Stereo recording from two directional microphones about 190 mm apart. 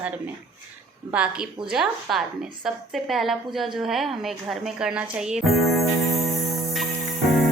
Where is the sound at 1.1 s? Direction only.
5° right (ahead or behind).